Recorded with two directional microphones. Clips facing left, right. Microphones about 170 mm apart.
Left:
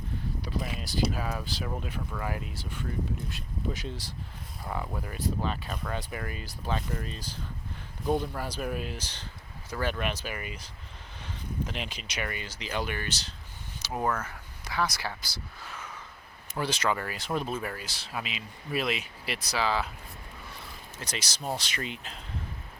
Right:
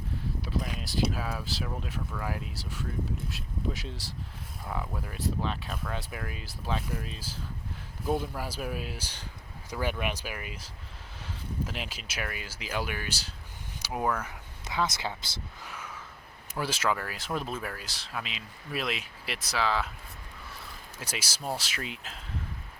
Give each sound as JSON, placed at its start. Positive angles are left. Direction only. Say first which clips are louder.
{"t": 0.4, "sound": "a sound", "louder": "right 1 dB", "side_deg": 0}
{"t": 1.1, "sound": "speech", "louder": "left 1 dB", "side_deg": 0}
{"t": 16.6, "sound": "speech", "louder": "left 1 dB", "side_deg": -5}
{"t": 21.0, "sound": "speech", "louder": "left 1 dB", "side_deg": -10}